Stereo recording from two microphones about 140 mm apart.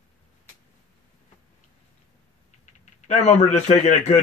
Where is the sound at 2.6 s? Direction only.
55° left (ahead or behind).